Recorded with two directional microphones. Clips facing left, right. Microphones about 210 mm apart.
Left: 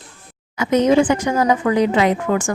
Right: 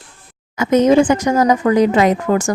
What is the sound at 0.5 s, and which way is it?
Speech, 45° right (ahead or behind).